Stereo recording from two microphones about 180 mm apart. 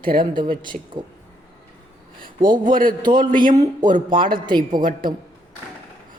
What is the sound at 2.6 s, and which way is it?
Speech, 50° right (ahead or behind).